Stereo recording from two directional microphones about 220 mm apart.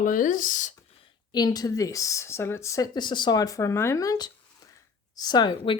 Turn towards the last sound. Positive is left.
turn(degrees=20)  # may be behind; listen again after turning